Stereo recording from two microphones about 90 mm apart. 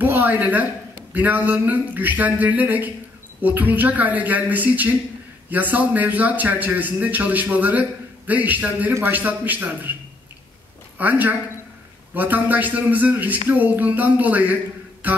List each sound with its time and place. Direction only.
0.0 s a man's voice: 25° right (ahead or behind)
11.0 s a man's voice: 20° right (ahead or behind)